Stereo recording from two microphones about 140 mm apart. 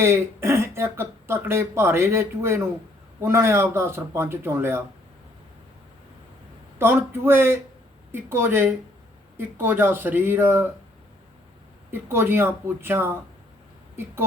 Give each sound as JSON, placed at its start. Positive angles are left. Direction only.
{"t": 0.0, "sound": "speech", "side_deg": -15}
{"t": 6.7, "sound": "speech", "side_deg": -15}
{"t": 11.9, "sound": "speech", "side_deg": -15}